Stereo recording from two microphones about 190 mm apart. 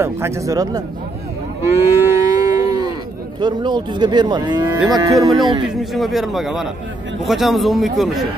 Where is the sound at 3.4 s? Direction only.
25° right (ahead or behind).